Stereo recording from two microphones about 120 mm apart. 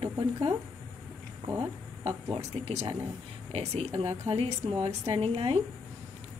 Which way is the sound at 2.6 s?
50° right (ahead or behind).